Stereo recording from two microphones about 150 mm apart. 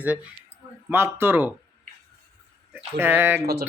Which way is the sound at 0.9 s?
15° right (ahead or behind).